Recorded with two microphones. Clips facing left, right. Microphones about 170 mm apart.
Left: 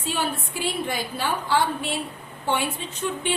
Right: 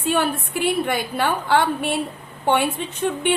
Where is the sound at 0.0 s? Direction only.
60° right (ahead or behind).